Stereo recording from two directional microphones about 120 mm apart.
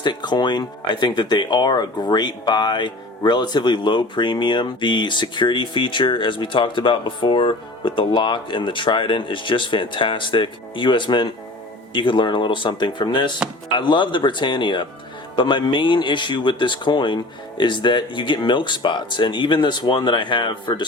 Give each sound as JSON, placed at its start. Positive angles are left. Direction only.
{"t": 0.0, "sound": "speech", "side_deg": 40}